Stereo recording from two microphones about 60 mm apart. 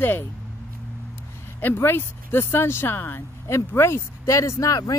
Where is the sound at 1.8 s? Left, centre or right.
Left.